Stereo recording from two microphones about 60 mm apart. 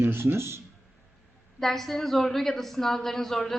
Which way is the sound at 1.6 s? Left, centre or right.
Centre.